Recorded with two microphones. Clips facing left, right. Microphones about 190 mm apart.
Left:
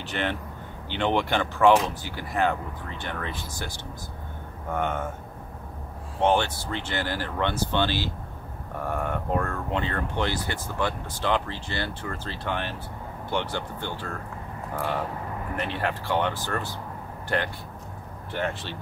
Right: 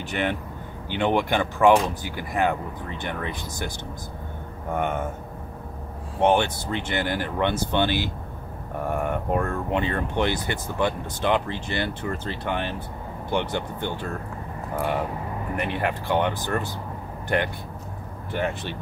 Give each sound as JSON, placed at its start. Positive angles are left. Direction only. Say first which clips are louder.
{"t": 0.0, "sound": "speech", "louder": "right 3 dB", "side_deg": -15}
{"t": 4.7, "sound": "speech", "louder": "right 2 dB", "side_deg": -15}
{"t": 6.2, "sound": "speech", "louder": "right 2 dB", "side_deg": -15}
{"t": 15.5, "sound": "speech", "louder": "right 3 dB", "side_deg": -15}